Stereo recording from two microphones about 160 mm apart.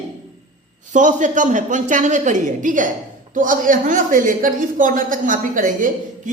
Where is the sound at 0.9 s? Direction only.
50° right (ahead or behind).